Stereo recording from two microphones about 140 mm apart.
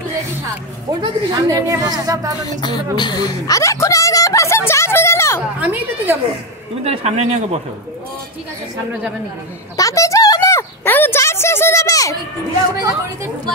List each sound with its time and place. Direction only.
1.0 s a woman's voice: 25° right (ahead or behind)
2.4 s a woman's voice: 30° left (ahead or behind)
5.6 s a woman's voice: 10° right (ahead or behind)
6.8 s a man's voice: 45° right (ahead or behind)
9.8 s a sound: 25° left (ahead or behind)